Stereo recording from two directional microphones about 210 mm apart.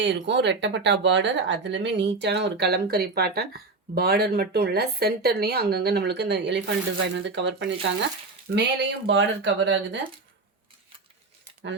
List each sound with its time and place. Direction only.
0.0 s speech: 55° right (ahead or behind)